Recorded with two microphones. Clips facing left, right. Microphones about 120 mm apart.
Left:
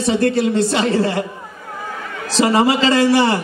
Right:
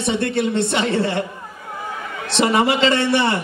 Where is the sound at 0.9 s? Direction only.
25° right (ahead or behind).